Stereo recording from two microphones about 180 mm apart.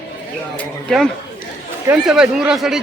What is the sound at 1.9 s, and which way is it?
Speech, 5° right (ahead or behind).